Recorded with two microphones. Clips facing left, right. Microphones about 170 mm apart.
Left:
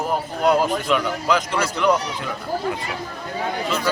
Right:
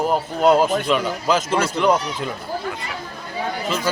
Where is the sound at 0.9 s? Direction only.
30° right (ahead or behind).